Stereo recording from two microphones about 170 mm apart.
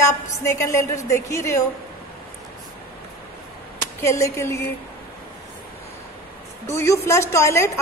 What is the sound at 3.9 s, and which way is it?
Speech, 15° left (ahead or behind).